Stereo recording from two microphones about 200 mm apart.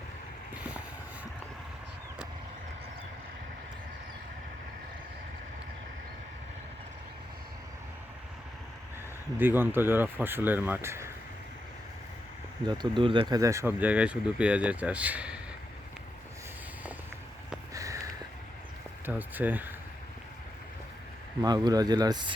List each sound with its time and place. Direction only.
0.5 s boat: 5° right (ahead or behind)
9.4 s speech: 10° right (ahead or behind)
12.6 s speech: 20° right (ahead or behind); by 15.4 s 5° right (ahead or behind)
17.7 s a sound: 15° right (ahead or behind)
19.0 s speech: 10° right (ahead or behind)
21.4 s speech: 20° right (ahead or behind)